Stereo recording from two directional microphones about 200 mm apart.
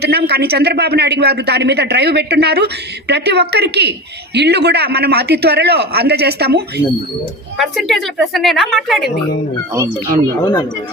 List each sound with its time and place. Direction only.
0.0 s speech: 55° right (ahead or behind)
7.5 s a woman's voice: centre (ahead or behind)
10.4 s speech: 20° left (ahead or behind)